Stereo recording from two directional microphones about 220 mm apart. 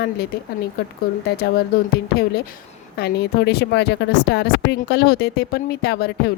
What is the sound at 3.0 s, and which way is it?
Speech, 50° left (ahead or behind).